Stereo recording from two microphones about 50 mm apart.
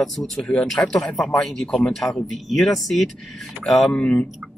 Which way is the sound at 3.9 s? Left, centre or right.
Left.